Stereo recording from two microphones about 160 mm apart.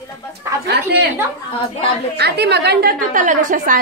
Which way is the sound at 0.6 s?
90° right.